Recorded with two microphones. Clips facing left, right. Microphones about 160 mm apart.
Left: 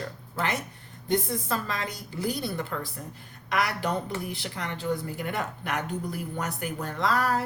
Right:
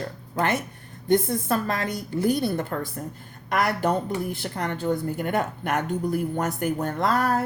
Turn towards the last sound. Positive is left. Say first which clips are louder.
# right 3 dB
turn(degrees=-50)  # may be behind; listen again after turning